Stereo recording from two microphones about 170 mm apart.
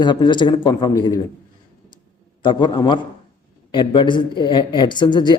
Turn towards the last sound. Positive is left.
turn(degrees=25)  # may be behind; listen again after turning